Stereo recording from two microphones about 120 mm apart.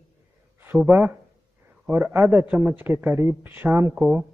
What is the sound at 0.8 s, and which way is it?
A man's voice, 15° right (ahead or behind).